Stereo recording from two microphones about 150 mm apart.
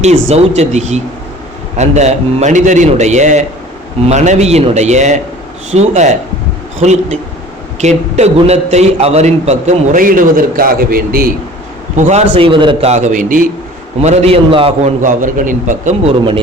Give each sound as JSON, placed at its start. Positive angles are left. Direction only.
{"t": 0.0, "sound": "a man's voice", "side_deg": -45}
{"t": 10.0, "sound": "a man's voice", "side_deg": -65}
{"t": 11.9, "sound": "a man's voice", "side_deg": -50}
{"t": 12.9, "sound": "a man's voice", "side_deg": -55}
{"t": 14.0, "sound": "a man's voice", "side_deg": -45}
{"t": 15.0, "sound": "a man's voice", "side_deg": -60}